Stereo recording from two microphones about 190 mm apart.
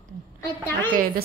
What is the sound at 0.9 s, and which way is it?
Speech, 50° right (ahead or behind).